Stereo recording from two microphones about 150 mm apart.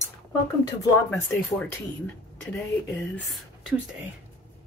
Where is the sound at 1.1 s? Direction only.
10° left (ahead or behind).